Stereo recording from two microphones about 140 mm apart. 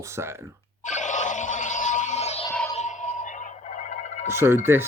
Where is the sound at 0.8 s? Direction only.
60° left (ahead or behind).